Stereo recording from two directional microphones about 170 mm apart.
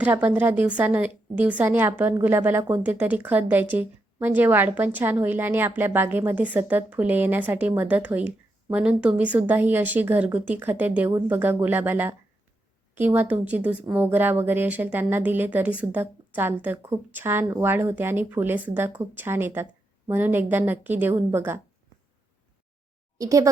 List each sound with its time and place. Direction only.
0.0 s a woman's voice: 10° right (ahead or behind)
23.1 s speech: 20° right (ahead or behind)